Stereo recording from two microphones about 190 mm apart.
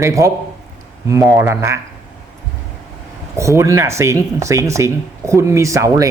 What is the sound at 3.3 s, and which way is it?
Speech, 15° right (ahead or behind).